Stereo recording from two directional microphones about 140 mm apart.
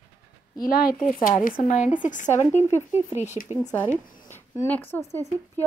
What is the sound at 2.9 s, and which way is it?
Speech, 15° right (ahead or behind).